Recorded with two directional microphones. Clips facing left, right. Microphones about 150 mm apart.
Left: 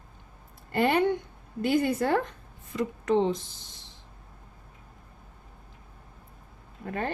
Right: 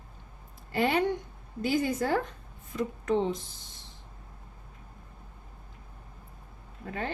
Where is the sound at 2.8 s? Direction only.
80° left.